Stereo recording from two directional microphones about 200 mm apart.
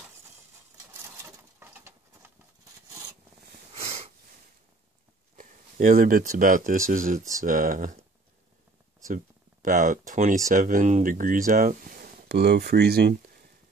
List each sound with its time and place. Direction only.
1.6 s bird: 10° right (ahead or behind)
5.3 s speech: 40° right (ahead or behind)
9.0 s speech: 40° right (ahead or behind)